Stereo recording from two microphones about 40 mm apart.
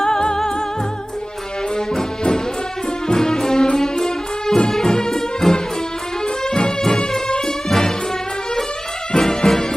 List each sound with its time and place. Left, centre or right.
0.0 s music: centre
2.0 s music: centre
9.1 s music: centre